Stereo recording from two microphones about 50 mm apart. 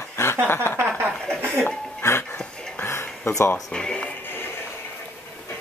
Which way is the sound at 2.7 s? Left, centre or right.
Left.